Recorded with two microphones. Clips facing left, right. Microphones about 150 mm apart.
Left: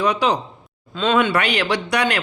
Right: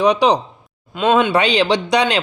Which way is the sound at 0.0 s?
15° right (ahead or behind).